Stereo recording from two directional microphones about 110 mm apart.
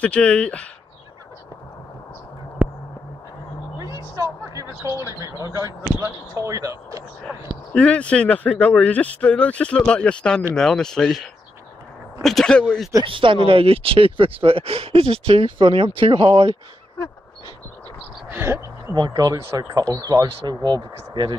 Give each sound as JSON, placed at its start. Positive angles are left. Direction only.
{"t": 0.0, "sound": "speech", "side_deg": 10}
{"t": 2.6, "sound": "a sound", "side_deg": -15}
{"t": 3.8, "sound": "speech", "side_deg": -30}
{"t": 7.7, "sound": "speech", "side_deg": 10}
{"t": 13.0, "sound": "speech", "side_deg": -50}
{"t": 18.3, "sound": "speech", "side_deg": -20}
{"t": 18.9, "sound": "speech", "side_deg": -35}